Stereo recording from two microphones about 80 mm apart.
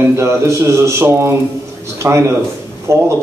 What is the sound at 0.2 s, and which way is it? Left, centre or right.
A man's voice, right.